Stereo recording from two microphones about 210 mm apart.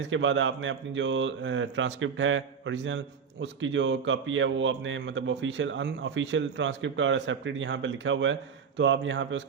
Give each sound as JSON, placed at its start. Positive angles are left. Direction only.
{"t": 0.0, "sound": "a man's voice", "side_deg": -65}